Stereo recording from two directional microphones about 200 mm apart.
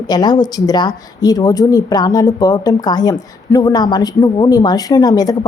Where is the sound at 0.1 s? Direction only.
20° left (ahead or behind).